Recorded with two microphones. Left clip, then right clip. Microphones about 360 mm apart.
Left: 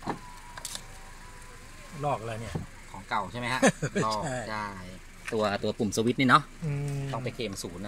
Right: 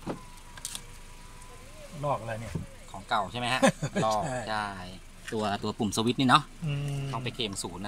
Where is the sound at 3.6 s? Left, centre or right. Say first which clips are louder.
Left 2 dB; right.